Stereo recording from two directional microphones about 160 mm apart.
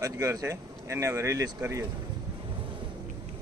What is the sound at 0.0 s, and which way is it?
Speech, 20° right (ahead or behind).